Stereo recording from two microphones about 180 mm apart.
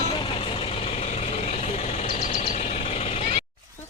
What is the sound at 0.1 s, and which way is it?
Vehicle, 30° left (ahead or behind).